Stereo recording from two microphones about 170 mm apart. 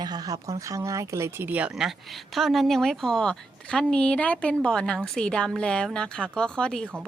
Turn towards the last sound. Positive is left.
turn(degrees=5)  # may be behind; listen again after turning